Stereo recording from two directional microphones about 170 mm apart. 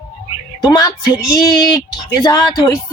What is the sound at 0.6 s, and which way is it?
Speech, 25° left (ahead or behind).